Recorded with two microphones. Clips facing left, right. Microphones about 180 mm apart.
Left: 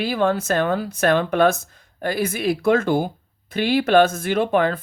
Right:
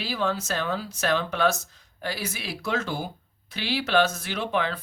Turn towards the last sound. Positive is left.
turn(degrees=50)  # may be behind; listen again after turning